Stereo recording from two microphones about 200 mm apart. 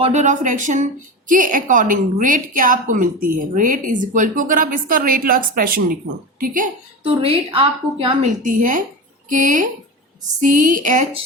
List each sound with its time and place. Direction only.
0.0 s a woman's voice: 35° right (ahead or behind)
7.0 s a woman's voice: 30° right (ahead or behind)